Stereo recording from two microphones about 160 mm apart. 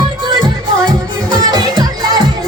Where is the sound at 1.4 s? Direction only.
25° right (ahead or behind).